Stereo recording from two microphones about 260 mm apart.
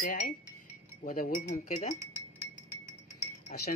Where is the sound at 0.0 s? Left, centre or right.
Left.